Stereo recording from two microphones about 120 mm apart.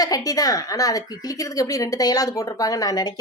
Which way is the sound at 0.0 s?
30° left (ahead or behind).